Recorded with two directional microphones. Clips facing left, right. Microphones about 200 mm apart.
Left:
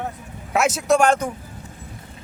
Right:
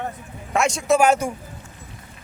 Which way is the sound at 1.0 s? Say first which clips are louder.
Even; 10° right (ahead or behind).